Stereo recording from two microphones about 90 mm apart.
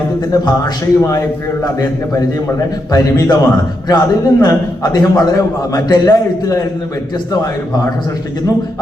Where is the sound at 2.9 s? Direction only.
45° left (ahead or behind).